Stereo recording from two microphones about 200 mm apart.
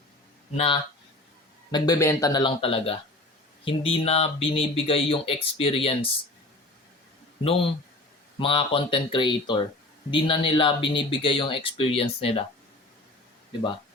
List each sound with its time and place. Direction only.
0.5 s speech: 30° left (ahead or behind)
1.7 s speech: 15° left (ahead or behind)
8.4 s speech: 25° left (ahead or behind)